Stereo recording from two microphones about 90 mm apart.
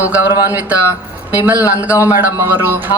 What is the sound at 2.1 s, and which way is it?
Speech, 25° right (ahead or behind).